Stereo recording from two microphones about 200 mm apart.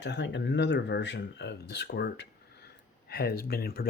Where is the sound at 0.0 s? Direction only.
60° left (ahead or behind).